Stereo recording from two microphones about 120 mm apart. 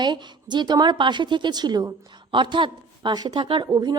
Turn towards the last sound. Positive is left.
turn(degrees=-40)  # may be behind; listen again after turning